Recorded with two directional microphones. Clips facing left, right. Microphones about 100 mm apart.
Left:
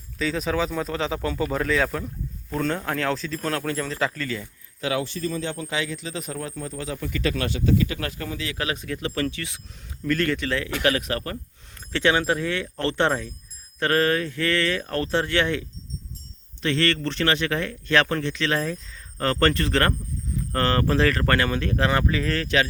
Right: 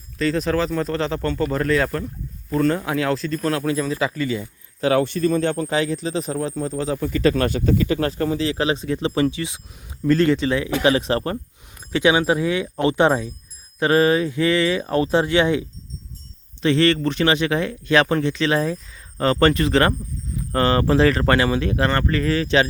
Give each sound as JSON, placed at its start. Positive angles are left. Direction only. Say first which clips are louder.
{"t": 0.2, "sound": "speech", "louder": "right 4 dB", "side_deg": 0}
{"t": 4.8, "sound": "a man's voice", "louder": "right 8 dB", "side_deg": -45}
{"t": 5.6, "sound": "speech", "louder": "right 7 dB", "side_deg": -40}
{"t": 11.9, "sound": "speech", "louder": "right 4 dB", "side_deg": -10}
{"t": 16.6, "sound": "speech", "louder": "right 6 dB", "side_deg": -15}
{"t": 21.8, "sound": "speech", "louder": "right 1 dB", "side_deg": 5}